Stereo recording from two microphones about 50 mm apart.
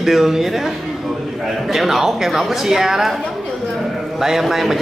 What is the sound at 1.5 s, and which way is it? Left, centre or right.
Speech, centre.